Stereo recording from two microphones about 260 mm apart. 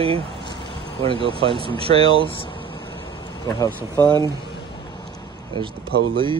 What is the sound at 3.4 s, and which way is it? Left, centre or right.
Speech, centre.